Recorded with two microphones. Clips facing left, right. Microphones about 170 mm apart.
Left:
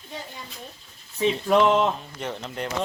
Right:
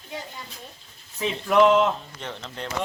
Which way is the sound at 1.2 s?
30° left (ahead or behind).